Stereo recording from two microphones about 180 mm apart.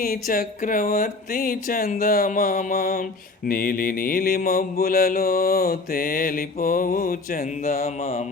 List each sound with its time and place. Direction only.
0.0 s speech: 55° left (ahead or behind); by 8.3 s 35° left (ahead or behind)